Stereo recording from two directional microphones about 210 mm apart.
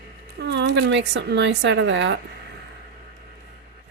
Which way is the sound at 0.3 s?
55° right (ahead or behind).